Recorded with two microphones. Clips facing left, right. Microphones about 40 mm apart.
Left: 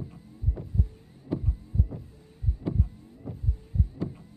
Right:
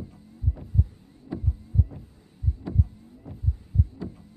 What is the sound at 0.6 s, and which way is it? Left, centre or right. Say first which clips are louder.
Vehicle: right 2 dB; centre.